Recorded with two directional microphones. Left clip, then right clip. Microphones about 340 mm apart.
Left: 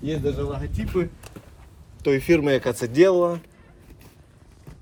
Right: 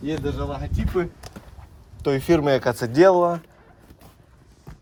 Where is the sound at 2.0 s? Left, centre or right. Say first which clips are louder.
Even; centre.